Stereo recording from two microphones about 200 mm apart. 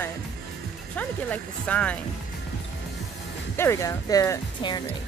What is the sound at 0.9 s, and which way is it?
Speech, 5° left (ahead or behind).